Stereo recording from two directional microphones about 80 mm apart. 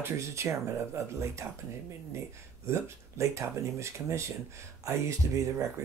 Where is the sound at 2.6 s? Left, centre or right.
Right.